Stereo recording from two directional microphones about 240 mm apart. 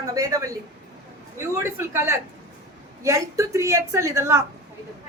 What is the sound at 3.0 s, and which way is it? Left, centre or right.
A woman's voice, centre.